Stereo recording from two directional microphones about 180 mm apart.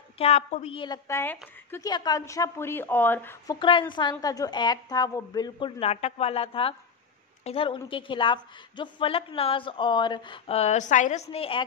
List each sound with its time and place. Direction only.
0.2 s a woman's voice: 35° left (ahead or behind); by 1.9 s 10° left (ahead or behind)
1.9 s a woman's voice: 20° left (ahead or behind)
3.5 s a woman's voice: 30° left (ahead or behind)
5.8 s a woman's voice: 35° left (ahead or behind)